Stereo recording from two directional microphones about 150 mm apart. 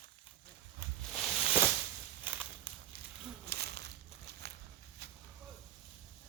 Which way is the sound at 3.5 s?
90° right.